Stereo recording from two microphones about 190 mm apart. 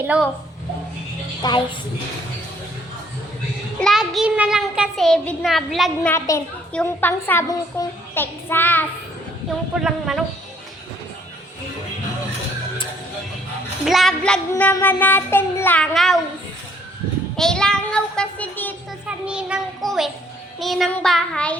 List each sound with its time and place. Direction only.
0.0 s a woman's voice: 5° right (ahead or behind)
1.4 s a woman's voice: 20° left (ahead or behind)
3.8 s a child's voice: centre (ahead or behind)
9.7 s a child's voice: 5° right (ahead or behind)
13.8 s a child's voice: centre (ahead or behind)
14.5 s a child's voice: 15° left (ahead or behind)
17.3 s a child's voice: 5° left (ahead or behind)
19.0 s a child's voice: 5° right (ahead or behind)